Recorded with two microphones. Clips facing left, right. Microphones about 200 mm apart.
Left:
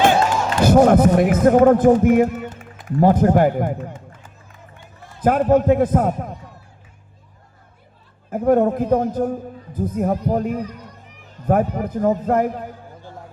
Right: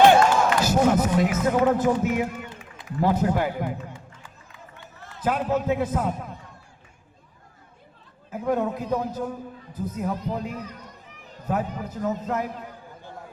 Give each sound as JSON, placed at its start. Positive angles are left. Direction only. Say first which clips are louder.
{"t": 0.6, "sound": "a man's voice", "louder": "left 13 dB", "side_deg": 55}
{"t": 8.3, "sound": "a man's voice", "louder": "left 9 dB", "side_deg": 50}